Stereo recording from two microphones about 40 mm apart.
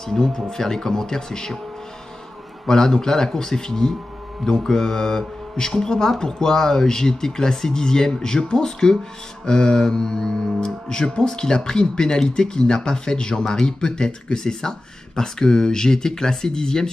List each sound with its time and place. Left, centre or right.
0.0 s speech: centre
2.7 s speech: centre